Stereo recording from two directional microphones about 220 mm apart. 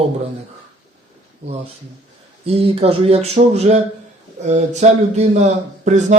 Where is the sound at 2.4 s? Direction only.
25° right (ahead or behind).